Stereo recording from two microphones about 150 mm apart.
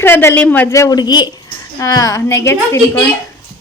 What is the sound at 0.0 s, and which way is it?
A woman's voice, 15° left (ahead or behind).